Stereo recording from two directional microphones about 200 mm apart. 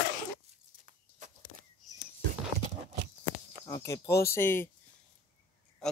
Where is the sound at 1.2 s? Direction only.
40° right (ahead or behind).